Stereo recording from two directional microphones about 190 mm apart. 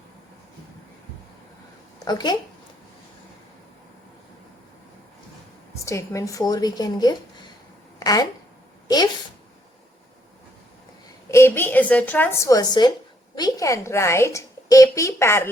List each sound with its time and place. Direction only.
2.0 s a woman's voice: 20° left (ahead or behind)
5.8 s a woman's voice: 15° left (ahead or behind)
11.3 s a woman's voice: 15° left (ahead or behind)